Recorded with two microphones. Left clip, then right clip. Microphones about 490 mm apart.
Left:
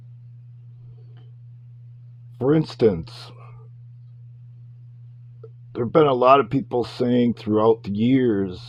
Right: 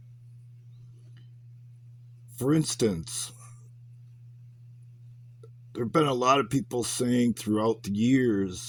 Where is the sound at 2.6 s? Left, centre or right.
Right.